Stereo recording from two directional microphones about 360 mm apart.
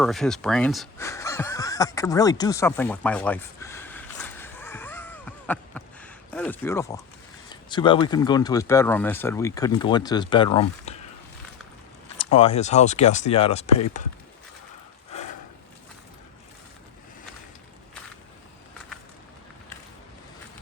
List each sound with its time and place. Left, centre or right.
0.0 s a sound: centre
7.5 s speech: centre
12.1 s speech: centre